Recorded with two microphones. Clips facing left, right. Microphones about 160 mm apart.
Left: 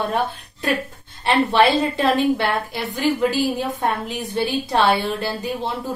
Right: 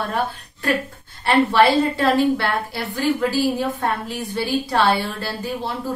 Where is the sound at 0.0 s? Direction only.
20° left (ahead or behind).